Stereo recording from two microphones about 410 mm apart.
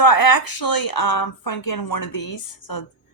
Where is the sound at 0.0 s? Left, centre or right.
Left.